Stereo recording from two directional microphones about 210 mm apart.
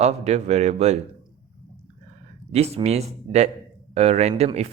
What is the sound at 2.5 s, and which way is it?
Speech, 30° right (ahead or behind).